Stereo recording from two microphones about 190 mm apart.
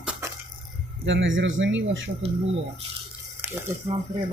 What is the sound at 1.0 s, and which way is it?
Speech, 80° right.